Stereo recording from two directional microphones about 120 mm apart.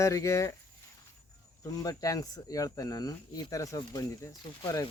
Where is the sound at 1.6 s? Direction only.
30° left (ahead or behind).